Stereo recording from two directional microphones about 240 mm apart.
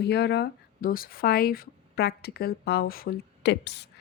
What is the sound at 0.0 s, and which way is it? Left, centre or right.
Speech, left.